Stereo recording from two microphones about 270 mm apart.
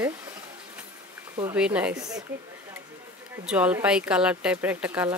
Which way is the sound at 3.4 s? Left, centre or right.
Centre.